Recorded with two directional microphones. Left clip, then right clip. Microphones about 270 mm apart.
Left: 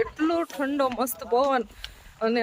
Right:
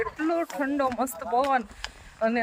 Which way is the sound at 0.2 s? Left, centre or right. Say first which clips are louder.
Left 1 dB; centre.